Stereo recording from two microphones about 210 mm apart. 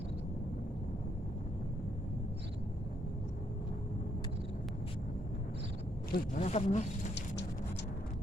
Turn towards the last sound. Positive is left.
turn(degrees=35)  # may be behind; listen again after turning